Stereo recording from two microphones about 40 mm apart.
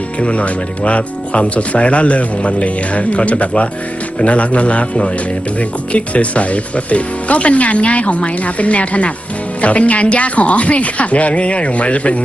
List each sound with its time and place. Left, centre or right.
0.2 s speech: left